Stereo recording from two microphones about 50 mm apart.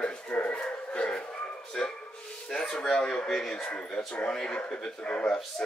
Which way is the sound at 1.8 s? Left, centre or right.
Centre.